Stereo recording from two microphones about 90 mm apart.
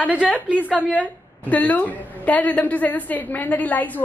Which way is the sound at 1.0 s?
20° left (ahead or behind).